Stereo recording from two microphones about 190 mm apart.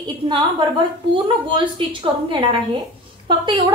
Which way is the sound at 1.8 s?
25° right (ahead or behind).